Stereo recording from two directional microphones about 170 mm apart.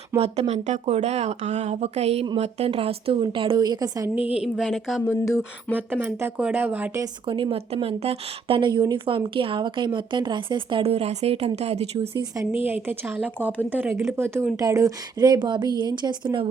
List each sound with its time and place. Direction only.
0.2 s speech: 40° right (ahead or behind); by 4.1 s 20° right (ahead or behind)
4.4 s speech: 5° right (ahead or behind)
5.0 s speech: 15° left (ahead or behind)
5.7 s a woman's voice: 10° right (ahead or behind)
7.0 s speech: 25° right (ahead or behind)
12.6 s a woman's voice: 10° right (ahead or behind); by 16.5 s 30° right (ahead or behind)